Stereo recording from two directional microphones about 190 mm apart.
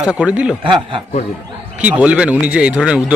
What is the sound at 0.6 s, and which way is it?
Speech, 25° right (ahead or behind).